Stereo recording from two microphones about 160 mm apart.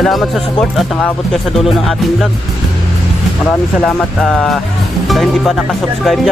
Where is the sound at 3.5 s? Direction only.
5° left (ahead or behind).